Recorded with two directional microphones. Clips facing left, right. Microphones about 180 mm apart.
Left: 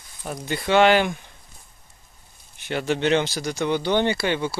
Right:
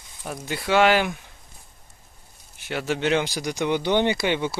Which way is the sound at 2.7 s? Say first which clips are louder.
Left 2 dB; 5° right (ahead or behind).